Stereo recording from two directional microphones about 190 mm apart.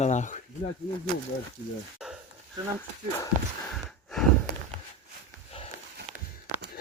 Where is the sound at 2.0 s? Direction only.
5° right (ahead or behind).